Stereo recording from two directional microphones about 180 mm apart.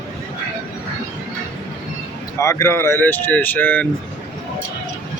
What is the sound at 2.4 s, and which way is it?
Speech, 15° left (ahead or behind).